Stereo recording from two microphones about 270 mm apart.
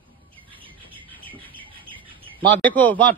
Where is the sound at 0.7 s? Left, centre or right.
Centre.